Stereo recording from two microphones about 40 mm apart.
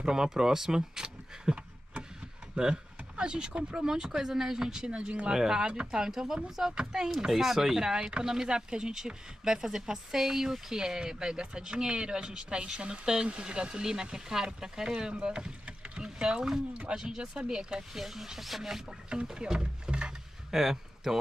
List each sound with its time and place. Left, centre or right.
0.0 s speech: centre
2.5 s speech: right
5.3 s speech: centre
17.9 s speech: centre
19.2 s speech: centre
20.5 s speech: centre